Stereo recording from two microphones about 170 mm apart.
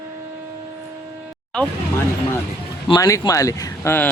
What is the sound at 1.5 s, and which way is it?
Speech, 10° left (ahead or behind).